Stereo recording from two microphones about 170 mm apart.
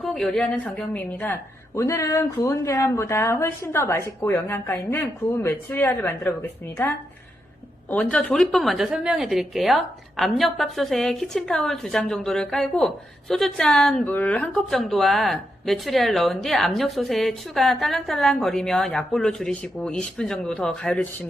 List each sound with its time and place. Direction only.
0.0 s a woman's voice: centre (ahead or behind)